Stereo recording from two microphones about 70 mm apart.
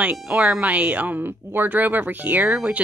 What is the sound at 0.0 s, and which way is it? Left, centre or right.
Speech, centre.